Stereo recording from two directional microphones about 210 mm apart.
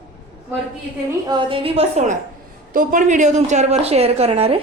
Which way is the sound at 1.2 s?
20° right (ahead or behind).